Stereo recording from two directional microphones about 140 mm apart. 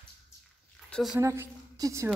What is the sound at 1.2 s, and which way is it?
Speech, 20° right (ahead or behind).